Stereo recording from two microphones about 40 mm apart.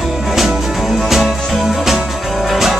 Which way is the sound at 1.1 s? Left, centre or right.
Centre.